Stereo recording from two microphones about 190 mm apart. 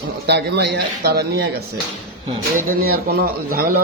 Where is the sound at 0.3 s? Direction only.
60° right (ahead or behind).